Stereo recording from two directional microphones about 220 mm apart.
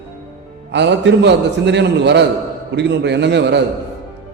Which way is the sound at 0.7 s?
50° right (ahead or behind).